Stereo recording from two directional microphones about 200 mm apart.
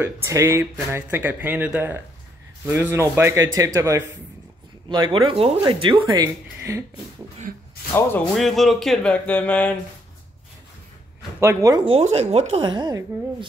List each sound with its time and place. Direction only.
0.0 s a woman's voice: 15° right (ahead or behind)
7.9 s speech: 5° left (ahead or behind)
11.3 s a woman's voice: 15° right (ahead or behind)